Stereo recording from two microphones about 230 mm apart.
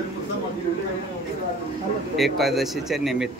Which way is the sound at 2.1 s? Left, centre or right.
Centre.